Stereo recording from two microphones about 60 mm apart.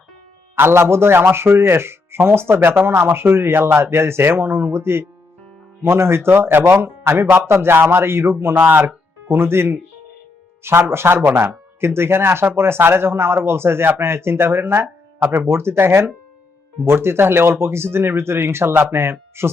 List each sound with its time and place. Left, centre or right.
0.5 s a man's voice: right
8.5 s speech: right
9.2 s a man's voice: right